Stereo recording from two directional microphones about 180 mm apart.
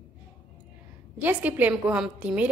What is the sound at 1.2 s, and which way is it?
A woman's voice, 10° right (ahead or behind).